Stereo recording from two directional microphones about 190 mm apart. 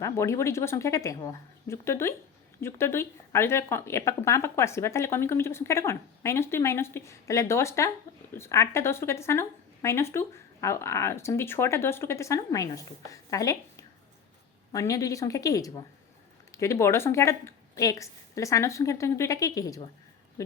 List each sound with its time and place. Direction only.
0.0 s speech: 15° left (ahead or behind)